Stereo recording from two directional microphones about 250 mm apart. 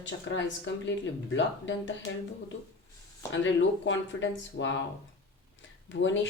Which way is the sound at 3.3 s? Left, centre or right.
Left.